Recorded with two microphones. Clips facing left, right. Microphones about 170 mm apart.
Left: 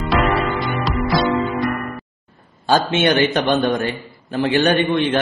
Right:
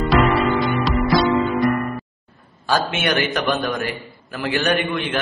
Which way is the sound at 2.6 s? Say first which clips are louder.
Left 5 dB; 25° left (ahead or behind).